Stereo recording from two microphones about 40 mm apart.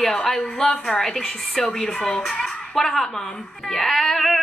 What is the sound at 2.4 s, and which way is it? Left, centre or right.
Music, centre.